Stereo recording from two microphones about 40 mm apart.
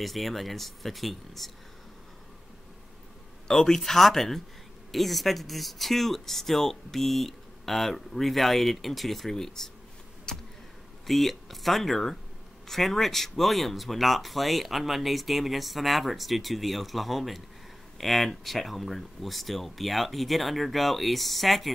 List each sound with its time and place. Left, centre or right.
0.0 s speech: centre
3.4 s speech: centre
10.3 s a sound: centre
11.1 s speech: centre